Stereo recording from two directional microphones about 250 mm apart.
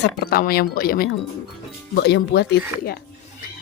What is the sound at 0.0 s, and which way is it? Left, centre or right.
Speech, left.